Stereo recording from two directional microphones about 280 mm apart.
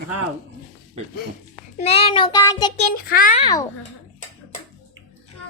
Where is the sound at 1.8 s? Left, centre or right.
Left.